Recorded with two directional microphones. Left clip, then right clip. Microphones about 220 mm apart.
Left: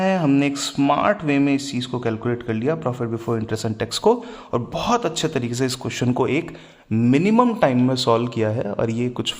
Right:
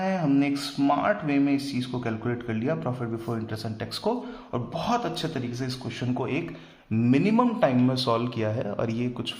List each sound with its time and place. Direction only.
0.0 s mantra: 35° left (ahead or behind)
6.9 s a man's voice: 25° left (ahead or behind)